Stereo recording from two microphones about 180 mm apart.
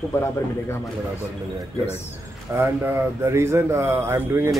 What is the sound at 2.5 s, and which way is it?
Speech, 15° right (ahead or behind).